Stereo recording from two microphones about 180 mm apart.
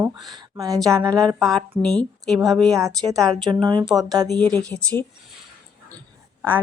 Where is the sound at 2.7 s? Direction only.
20° right (ahead or behind).